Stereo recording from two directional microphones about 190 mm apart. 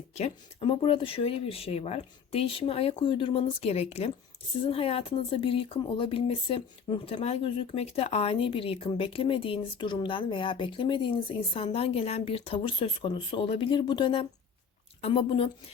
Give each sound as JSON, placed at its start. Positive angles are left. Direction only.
{"t": 0.1, "sound": "speech", "side_deg": 30}